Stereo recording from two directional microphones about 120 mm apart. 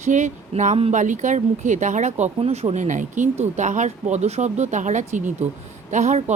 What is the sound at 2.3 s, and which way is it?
Speech, 55° right (ahead or behind).